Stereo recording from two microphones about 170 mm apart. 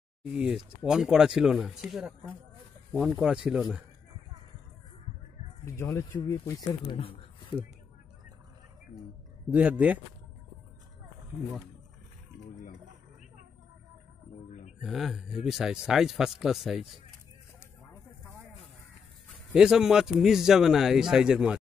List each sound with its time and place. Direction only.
0.2 s speech: 5° right (ahead or behind)
5.7 s speech: 15° left (ahead or behind); by 7.5 s 35° left (ahead or behind)
9.5 s speech: 5° right (ahead or behind)
14.8 s speech: centre (ahead or behind)
19.5 s speech: 5° right (ahead or behind)